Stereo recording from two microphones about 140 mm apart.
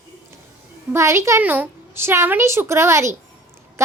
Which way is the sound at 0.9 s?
20° right (ahead or behind).